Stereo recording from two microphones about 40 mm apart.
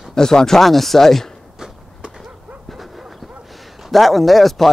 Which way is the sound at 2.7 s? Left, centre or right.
Centre.